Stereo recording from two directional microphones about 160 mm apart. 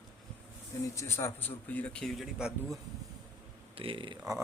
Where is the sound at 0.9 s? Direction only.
15° left (ahead or behind); by 2.7 s centre (ahead or behind).